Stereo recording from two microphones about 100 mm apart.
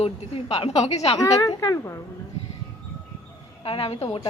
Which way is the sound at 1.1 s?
35° left (ahead or behind).